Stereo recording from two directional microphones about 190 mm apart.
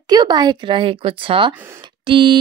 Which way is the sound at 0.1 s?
20° right (ahead or behind).